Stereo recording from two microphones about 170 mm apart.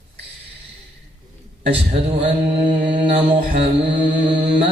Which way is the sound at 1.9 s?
35° right (ahead or behind).